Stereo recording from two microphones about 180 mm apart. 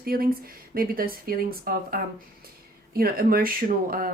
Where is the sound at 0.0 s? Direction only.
55° right (ahead or behind).